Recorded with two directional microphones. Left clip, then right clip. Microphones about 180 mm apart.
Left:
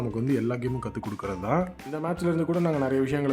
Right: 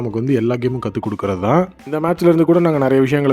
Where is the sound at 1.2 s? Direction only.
50° right (ahead or behind).